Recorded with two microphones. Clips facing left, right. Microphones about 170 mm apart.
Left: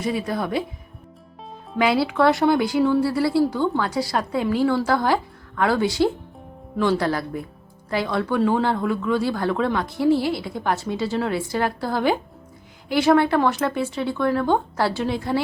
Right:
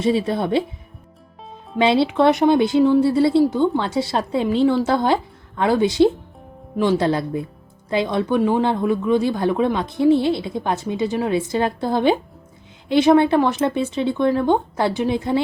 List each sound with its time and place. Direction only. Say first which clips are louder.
0.0 s speech: right 5 dB; 25° right (ahead or behind)
1.8 s speech: right 3 dB; 25° right (ahead or behind)